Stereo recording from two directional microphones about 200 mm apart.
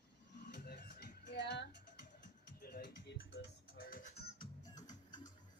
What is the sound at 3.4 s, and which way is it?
Speech, 60° left (ahead or behind).